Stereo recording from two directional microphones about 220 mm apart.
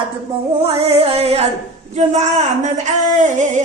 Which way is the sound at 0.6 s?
25° right (ahead or behind).